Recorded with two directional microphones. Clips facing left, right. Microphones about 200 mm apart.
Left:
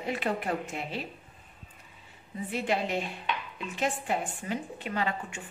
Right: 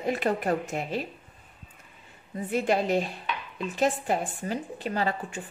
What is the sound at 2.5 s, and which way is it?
A woman's voice, 45° right (ahead or behind).